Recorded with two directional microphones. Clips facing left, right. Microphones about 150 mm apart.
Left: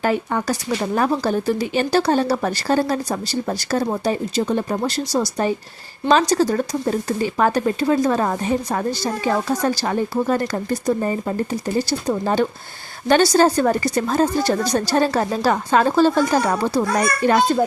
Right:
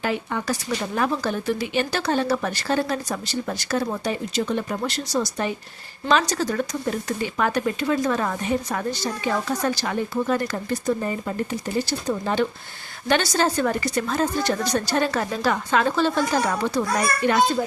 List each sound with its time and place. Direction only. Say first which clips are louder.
0.0 s speech: left 5 dB; 45° left (ahead or behind)